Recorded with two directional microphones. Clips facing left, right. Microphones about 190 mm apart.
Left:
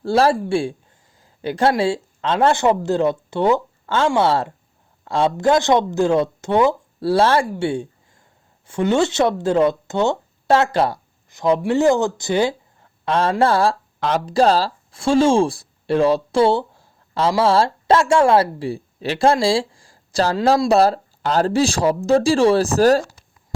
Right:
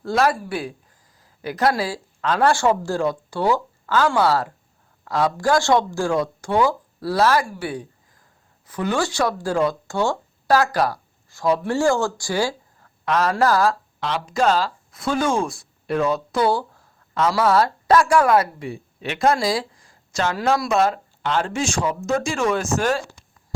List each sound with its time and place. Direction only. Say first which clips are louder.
0.0 s speech: left 4 dB; 30° left (ahead or behind)